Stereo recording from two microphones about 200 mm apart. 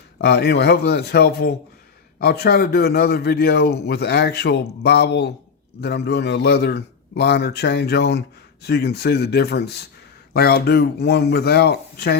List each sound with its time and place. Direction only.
0.2 s a man's voice: 55° left (ahead or behind)